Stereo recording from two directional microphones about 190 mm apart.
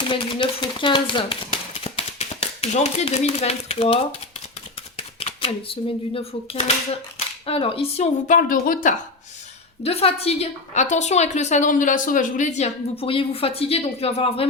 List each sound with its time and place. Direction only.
0.0 s chopping: 25° left (ahead or behind)
1.8 s speech: 30° left (ahead or behind)
5.2 s a woman's voice: 30° left (ahead or behind)
9.8 s a woman's voice: 30° left (ahead or behind)